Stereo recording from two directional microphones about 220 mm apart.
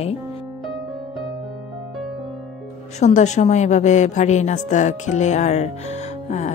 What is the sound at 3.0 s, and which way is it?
A woman's voice, 30° left (ahead or behind).